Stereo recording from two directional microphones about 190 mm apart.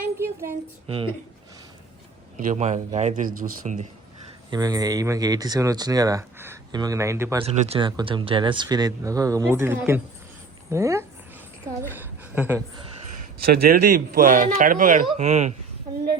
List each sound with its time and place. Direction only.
0.0 s a sound: 10° right (ahead or behind)
0.9 s speech: 30° right (ahead or behind)
2.5 s speech: 40° right (ahead or behind)
4.5 s speech: 20° right (ahead or behind)
7.4 s a woman's voice: 30° right (ahead or behind); by 12.6 s 10° right (ahead or behind)
13.4 s a man's voice: 55° right (ahead or behind); by 15.5 s 35° right (ahead or behind)